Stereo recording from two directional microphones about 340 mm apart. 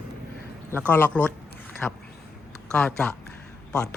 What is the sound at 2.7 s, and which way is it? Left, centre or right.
Speech, centre.